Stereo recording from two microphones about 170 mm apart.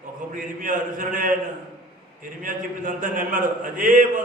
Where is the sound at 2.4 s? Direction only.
50° right (ahead or behind).